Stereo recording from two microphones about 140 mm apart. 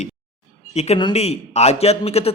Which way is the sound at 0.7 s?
50° left (ahead or behind).